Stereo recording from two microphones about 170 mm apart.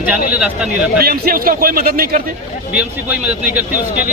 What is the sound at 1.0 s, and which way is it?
Speech, 60° right (ahead or behind).